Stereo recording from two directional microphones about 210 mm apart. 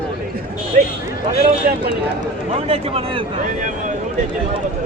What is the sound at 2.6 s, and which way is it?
Speech, 30° right (ahead or behind).